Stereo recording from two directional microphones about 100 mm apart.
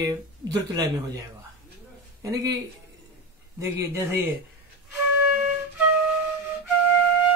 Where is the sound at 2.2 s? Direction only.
35° right (ahead or behind).